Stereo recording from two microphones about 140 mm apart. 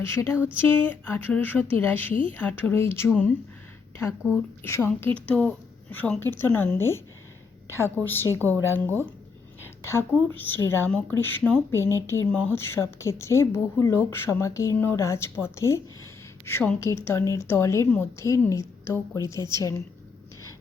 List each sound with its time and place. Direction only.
0.0 s a woman's voice: 20° left (ahead or behind)
3.1 s a woman's voice: 5° left (ahead or behind)
4.2 s a woman's voice: 5° right (ahead or behind)
4.6 s a woman's voice: 20° left (ahead or behind)
8.3 s speech: 20° right (ahead or behind)
8.6 s a woman's voice: 15° left (ahead or behind)
12.3 s a woman's voice: 10° left (ahead or behind)
12.5 s a woman's voice: 20° left (ahead or behind)